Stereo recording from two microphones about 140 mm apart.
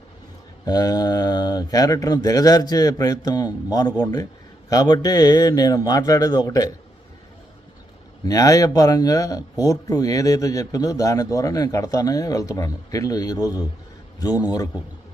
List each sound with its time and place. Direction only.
0.6 s a man's voice: 30° left (ahead or behind)
8.2 s a man's voice: 25° left (ahead or behind)